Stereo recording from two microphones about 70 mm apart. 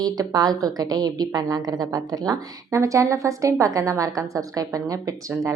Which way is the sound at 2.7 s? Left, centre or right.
Right.